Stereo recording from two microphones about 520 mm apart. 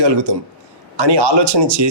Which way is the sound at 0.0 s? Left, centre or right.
Right.